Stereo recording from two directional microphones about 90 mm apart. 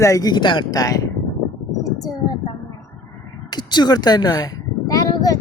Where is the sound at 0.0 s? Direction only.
40° left (ahead or behind).